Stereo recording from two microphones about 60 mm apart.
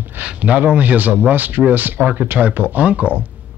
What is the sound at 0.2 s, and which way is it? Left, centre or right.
Speech, right.